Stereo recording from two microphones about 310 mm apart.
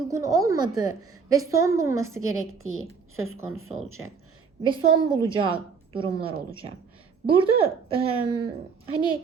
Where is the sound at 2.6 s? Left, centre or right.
Right.